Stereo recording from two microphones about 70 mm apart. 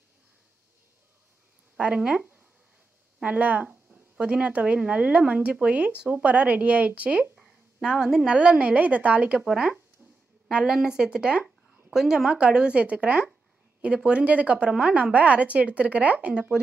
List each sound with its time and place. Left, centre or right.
1.8 s a woman's voice: centre
7.3 s a woman's voice: centre
11.4 s a sound: centre
12.3 s a woman's voice: centre